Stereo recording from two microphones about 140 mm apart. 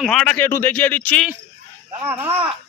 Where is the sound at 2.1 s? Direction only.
15° right (ahead or behind).